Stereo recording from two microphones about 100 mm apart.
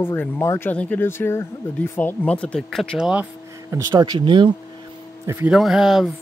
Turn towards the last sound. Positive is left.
turn(degrees=-5)  # may be behind; listen again after turning